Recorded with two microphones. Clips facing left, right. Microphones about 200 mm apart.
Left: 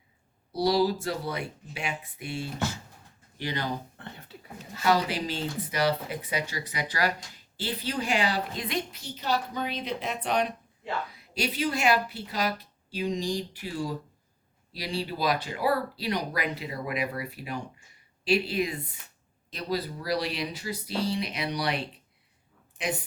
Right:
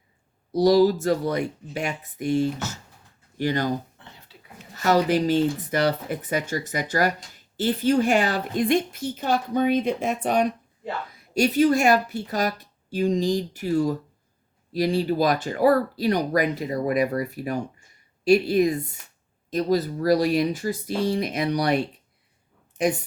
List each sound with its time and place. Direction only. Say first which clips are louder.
0.5 s speech: right 7 dB; 45° right (ahead or behind)
4.0 s a sound: left 5 dB; 55° left (ahead or behind)
4.8 s a woman's voice: right 6 dB; 45° right (ahead or behind)